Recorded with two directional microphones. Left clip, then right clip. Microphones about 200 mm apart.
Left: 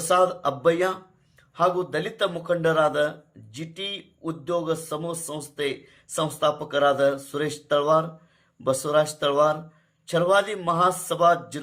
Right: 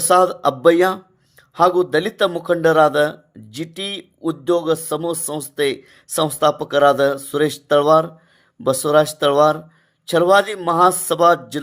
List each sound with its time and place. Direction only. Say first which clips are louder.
0.1 s a man's voice: right 7 dB; 40° right (ahead or behind)